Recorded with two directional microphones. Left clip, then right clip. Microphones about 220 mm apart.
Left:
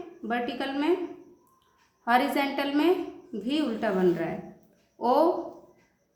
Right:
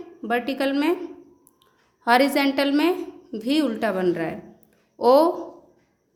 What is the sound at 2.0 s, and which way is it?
A woman's voice, 50° right (ahead or behind).